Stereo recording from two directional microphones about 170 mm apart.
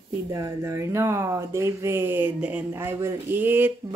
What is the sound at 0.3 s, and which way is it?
Speech, 20° right (ahead or behind).